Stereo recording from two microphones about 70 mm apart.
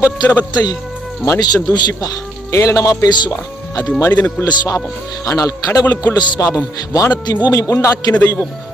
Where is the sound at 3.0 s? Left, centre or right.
Left.